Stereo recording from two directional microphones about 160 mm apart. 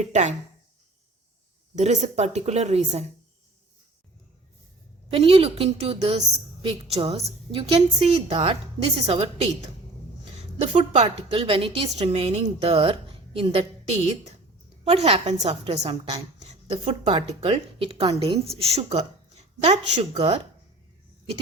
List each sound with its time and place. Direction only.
0.0 s speech: 45° right (ahead or behind)
1.7 s speech: 45° right (ahead or behind)
5.1 s a woman's voice: 35° right (ahead or behind)